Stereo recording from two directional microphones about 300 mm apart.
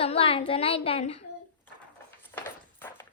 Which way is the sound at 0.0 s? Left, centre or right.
Centre.